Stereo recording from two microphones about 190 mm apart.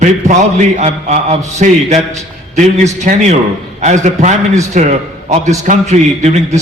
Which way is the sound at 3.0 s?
40° right (ahead or behind).